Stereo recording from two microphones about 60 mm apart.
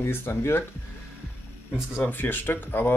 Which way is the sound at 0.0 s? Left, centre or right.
Left.